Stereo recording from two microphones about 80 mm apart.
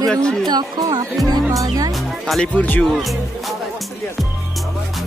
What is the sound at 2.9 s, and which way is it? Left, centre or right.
Music, centre.